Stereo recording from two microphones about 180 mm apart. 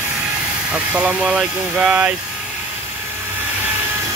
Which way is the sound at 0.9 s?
5° right (ahead or behind).